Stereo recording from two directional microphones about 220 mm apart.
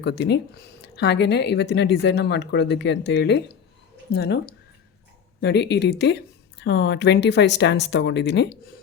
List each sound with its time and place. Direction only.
0.0 s speech: 50° left (ahead or behind)